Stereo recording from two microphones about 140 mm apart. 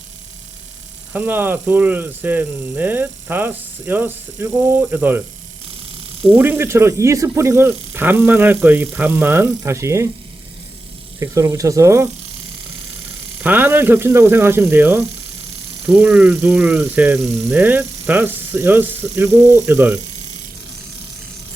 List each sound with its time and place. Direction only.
1.1 s speech: 15° right (ahead or behind)
6.3 s speech: 15° right (ahead or behind)
11.2 s speech: 20° right (ahead or behind)
13.4 s speech: 15° right (ahead or behind)
16.0 s speech: 5° right (ahead or behind)
16.4 s speech: 15° right (ahead or behind)